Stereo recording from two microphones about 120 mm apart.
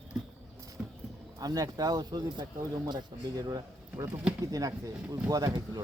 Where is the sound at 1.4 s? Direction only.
30° right (ahead or behind).